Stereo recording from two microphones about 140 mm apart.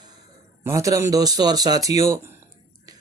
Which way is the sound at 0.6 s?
20° right (ahead or behind).